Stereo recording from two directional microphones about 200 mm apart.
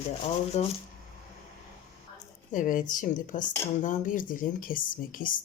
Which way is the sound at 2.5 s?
40° left (ahead or behind).